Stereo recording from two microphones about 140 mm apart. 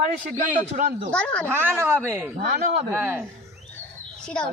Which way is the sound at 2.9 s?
15° right (ahead or behind).